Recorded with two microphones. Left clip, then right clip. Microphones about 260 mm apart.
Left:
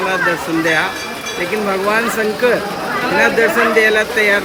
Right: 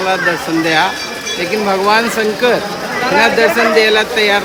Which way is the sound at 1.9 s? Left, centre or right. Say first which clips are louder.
Right 3 dB; centre.